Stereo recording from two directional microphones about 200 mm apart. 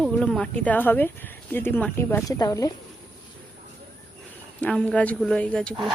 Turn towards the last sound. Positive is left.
turn(degrees=5)  # may be behind; listen again after turning